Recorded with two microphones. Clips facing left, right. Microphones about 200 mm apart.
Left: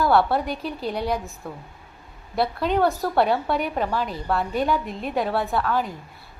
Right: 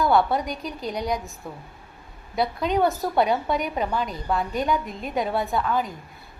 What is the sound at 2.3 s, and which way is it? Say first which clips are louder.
Speech: left 1 dB; centre (ahead or behind).